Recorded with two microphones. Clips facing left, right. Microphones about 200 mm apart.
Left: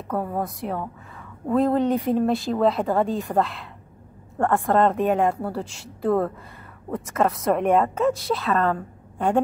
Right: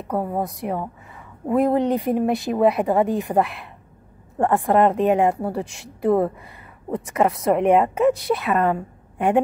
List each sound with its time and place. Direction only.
0.3 s a woman's voice: 15° right (ahead or behind)